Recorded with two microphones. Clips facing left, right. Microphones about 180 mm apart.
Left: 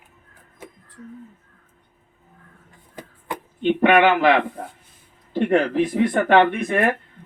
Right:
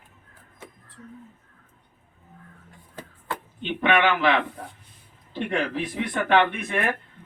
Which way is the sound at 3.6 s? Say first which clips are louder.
Left 7 dB; 45° left (ahead or behind).